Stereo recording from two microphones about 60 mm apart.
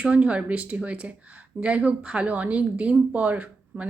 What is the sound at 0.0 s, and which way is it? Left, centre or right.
Speech, right.